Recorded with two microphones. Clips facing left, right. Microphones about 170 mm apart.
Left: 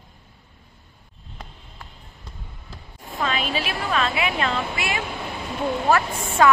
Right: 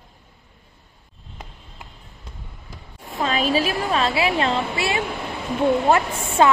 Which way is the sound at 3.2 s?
40° right (ahead or behind).